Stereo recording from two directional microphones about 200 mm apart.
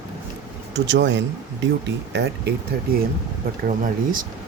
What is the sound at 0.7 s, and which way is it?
Speech, 60° right (ahead or behind).